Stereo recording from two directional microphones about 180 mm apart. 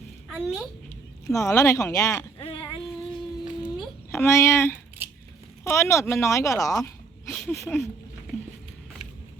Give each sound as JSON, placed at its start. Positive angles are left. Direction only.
{"t": 0.3, "sound": "a woman's voice", "side_deg": -5}
{"t": 0.9, "sound": "speech", "side_deg": 15}
{"t": 2.4, "sound": "a sound", "side_deg": 30}
{"t": 4.1, "sound": "speech", "side_deg": 15}